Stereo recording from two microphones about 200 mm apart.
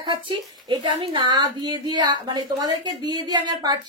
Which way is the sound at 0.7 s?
20° right (ahead or behind).